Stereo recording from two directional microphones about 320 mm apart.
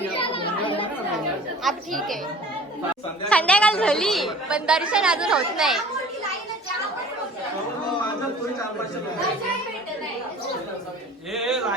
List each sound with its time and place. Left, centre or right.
0.2 s children playing: centre
1.6 s a woman's voice: centre
3.2 s a woman's voice: centre
11.3 s a sound: centre